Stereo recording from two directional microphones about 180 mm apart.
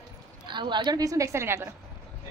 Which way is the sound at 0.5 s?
25° right (ahead or behind).